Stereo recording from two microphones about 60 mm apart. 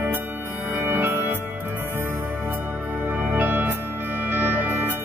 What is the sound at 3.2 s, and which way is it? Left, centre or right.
Music, right.